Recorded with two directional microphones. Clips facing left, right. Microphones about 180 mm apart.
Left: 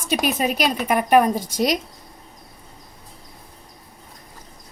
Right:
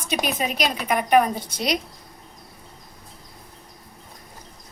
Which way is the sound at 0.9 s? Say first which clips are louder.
Left 2 dB; 45° left (ahead or behind).